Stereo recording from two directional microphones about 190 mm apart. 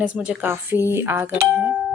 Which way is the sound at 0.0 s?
5° right (ahead or behind).